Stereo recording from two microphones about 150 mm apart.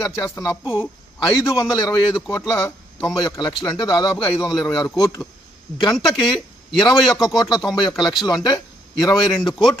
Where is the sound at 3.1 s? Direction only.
30° left (ahead or behind).